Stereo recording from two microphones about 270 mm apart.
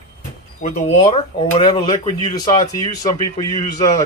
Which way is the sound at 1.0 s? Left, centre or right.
Centre.